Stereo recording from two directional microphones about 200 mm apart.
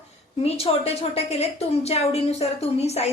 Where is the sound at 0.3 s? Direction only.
30° left (ahead or behind).